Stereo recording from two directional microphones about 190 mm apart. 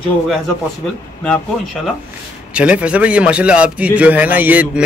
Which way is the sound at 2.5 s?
5° right (ahead or behind).